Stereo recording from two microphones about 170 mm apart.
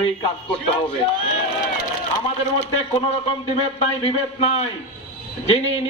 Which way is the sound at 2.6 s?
40° left (ahead or behind).